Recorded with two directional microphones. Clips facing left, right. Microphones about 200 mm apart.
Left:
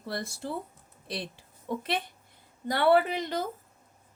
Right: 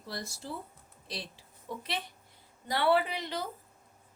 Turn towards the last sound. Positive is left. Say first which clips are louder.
# left 5 dB
turn(degrees=45)  # may be behind; listen again after turning